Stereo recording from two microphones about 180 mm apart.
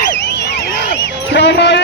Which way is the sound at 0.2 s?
70° left (ahead or behind).